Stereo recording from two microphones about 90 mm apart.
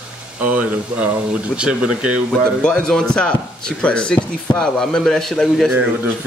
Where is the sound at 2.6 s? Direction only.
10° left (ahead or behind).